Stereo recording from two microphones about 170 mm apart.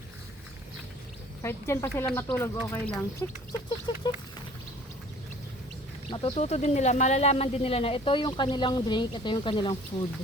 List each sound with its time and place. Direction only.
1.4 s speech: 15° left (ahead or behind)
3.9 s a sound: 25° left (ahead or behind)
6.1 s speech: 30° left (ahead or behind)